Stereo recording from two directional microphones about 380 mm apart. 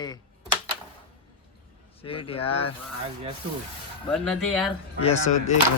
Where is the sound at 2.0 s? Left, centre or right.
Centre.